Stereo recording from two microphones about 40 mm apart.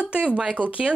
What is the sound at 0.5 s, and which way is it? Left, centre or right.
Speech, right.